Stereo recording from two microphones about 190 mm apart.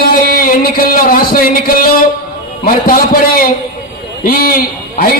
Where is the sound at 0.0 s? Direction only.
50° left (ahead or behind).